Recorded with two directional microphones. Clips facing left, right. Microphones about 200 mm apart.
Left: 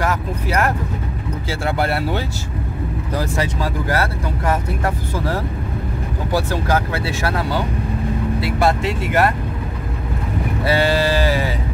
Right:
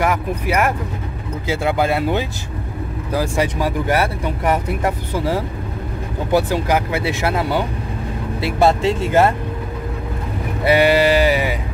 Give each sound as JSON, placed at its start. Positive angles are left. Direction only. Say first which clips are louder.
{"t": 0.0, "sound": "speech", "louder": "right 2 dB", "side_deg": -15}
{"t": 10.6, "sound": "speech", "louder": "right 4 dB", "side_deg": -15}